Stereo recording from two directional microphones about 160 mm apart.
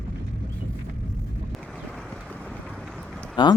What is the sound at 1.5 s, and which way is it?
Clip-clop, centre (ahead or behind).